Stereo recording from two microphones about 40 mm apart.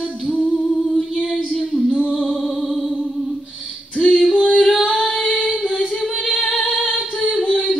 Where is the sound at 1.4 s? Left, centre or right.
Left.